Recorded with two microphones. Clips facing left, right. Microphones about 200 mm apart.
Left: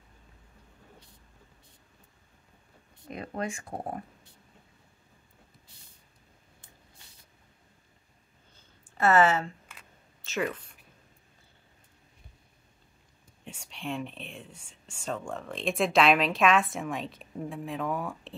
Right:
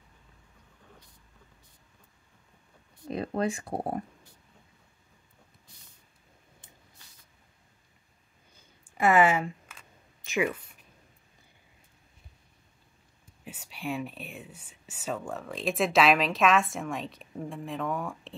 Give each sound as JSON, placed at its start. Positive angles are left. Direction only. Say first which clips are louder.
{"t": 3.1, "sound": "speech", "louder": "right 5 dB", "side_deg": -35}
{"t": 8.8, "sound": "a woman's voice", "louder": "even", "side_deg": -15}
{"t": 13.4, "sound": "speech", "louder": "right 1 dB", "side_deg": -5}